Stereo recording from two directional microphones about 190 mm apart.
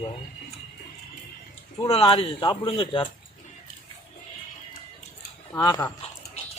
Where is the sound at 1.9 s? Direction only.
30° left (ahead or behind).